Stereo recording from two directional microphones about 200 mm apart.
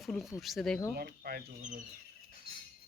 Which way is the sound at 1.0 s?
50° right (ahead or behind).